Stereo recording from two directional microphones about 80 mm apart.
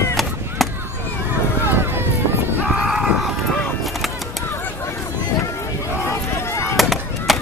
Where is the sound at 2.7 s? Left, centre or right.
Centre.